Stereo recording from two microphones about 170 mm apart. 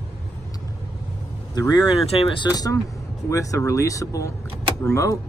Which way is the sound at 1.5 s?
25° left (ahead or behind).